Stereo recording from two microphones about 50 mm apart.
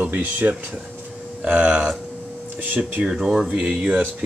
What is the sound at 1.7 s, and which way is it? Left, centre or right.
Speech, right.